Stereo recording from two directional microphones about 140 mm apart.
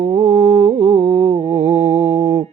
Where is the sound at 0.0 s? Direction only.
45° right (ahead or behind).